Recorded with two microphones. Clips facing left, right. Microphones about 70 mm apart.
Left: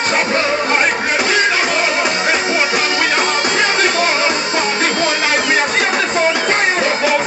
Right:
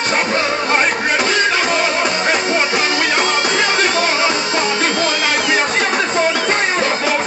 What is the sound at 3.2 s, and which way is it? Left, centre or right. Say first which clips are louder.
Music: even; left.